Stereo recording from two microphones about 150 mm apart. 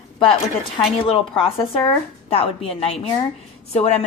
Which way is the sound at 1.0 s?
35° left (ahead or behind).